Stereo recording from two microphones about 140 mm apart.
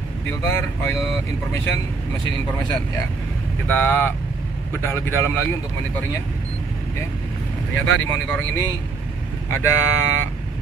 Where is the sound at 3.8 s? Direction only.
15° left (ahead or behind).